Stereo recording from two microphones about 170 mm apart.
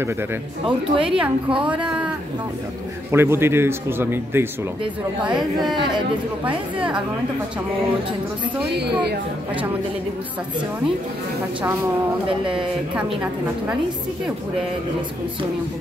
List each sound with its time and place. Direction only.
0.7 s speech: 30° right (ahead or behind)
1.9 s a sound: 5° right (ahead or behind)
3.1 s speech: 15° right (ahead or behind)
5.2 s speech: 25° right (ahead or behind)
12.9 s speech: 5° right (ahead or behind)